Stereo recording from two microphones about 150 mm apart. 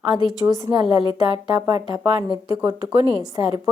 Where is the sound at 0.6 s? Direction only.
30° right (ahead or behind).